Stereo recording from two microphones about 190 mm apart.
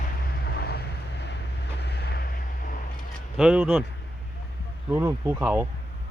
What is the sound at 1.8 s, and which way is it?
Vehicle, 60° left (ahead or behind).